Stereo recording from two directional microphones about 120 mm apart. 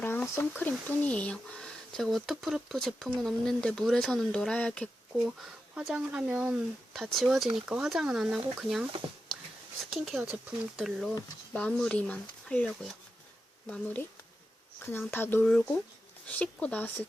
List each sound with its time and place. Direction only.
0.0 s speech: 15° left (ahead or behind)
5.7 s speech: 10° right (ahead or behind)
9.9 s speech: centre (ahead or behind)